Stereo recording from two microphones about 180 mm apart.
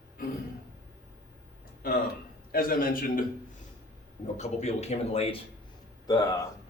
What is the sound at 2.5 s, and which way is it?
Speech, 55° left (ahead or behind).